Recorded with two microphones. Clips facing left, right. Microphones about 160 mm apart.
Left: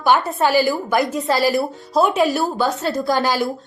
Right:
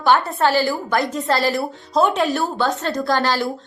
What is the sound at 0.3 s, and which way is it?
A woman's voice, 15° left (ahead or behind).